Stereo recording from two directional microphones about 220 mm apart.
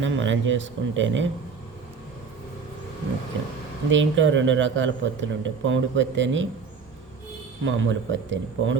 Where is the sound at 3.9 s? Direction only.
60° right (ahead or behind).